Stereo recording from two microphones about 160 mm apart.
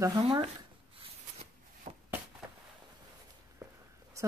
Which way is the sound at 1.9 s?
45° right (ahead or behind).